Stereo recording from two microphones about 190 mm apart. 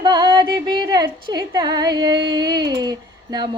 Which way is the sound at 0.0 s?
20° right (ahead or behind).